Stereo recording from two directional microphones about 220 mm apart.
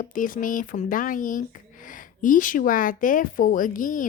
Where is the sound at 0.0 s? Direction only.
40° left (ahead or behind).